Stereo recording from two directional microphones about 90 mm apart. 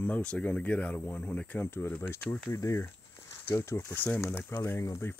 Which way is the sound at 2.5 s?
40° left (ahead or behind).